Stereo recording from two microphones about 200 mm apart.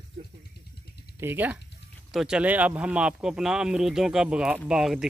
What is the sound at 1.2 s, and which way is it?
Speech, 10° right (ahead or behind).